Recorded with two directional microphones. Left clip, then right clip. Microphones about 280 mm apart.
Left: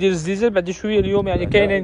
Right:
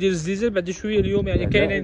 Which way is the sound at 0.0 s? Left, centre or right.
Centre.